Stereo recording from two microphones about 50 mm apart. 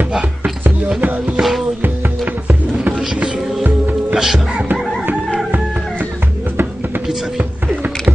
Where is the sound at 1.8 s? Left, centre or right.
Right.